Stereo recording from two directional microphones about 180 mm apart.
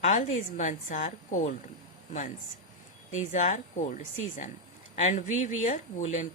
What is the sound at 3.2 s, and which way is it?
Speech, 40° left (ahead or behind).